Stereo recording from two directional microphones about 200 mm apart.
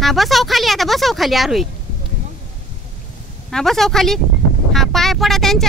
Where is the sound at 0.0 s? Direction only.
Centre (ahead or behind).